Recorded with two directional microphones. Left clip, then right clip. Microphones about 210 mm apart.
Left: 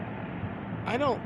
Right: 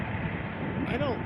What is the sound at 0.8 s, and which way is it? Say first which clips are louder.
Vehicle: left 4 dB; 15° left (ahead or behind).